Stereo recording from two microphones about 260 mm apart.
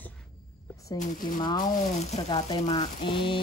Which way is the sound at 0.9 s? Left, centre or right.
Left.